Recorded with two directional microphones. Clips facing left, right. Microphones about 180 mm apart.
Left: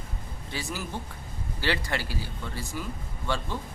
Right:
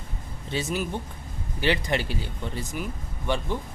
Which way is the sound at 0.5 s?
20° right (ahead or behind).